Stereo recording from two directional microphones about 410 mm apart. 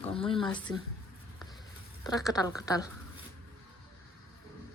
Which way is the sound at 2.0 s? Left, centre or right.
Centre.